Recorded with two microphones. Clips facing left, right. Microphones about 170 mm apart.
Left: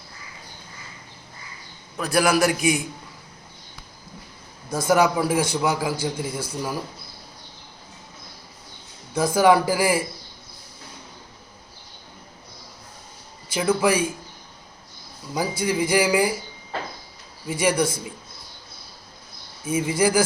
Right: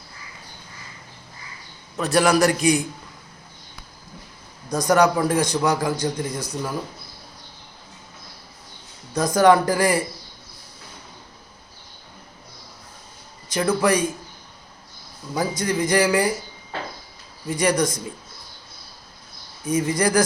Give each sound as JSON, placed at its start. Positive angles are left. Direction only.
{"t": 2.1, "sound": "a man's voice", "side_deg": 0}
{"t": 4.7, "sound": "a man's voice", "side_deg": 5}
{"t": 9.1, "sound": "a man's voice", "side_deg": 10}
{"t": 13.5, "sound": "a man's voice", "side_deg": 10}
{"t": 15.4, "sound": "a man's voice", "side_deg": 10}
{"t": 17.4, "sound": "a man's voice", "side_deg": 5}
{"t": 19.6, "sound": "a man's voice", "side_deg": 10}